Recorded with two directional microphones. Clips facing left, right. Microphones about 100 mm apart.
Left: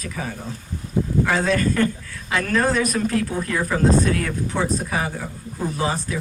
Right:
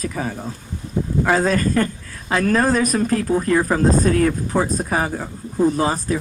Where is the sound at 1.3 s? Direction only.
40° right (ahead or behind).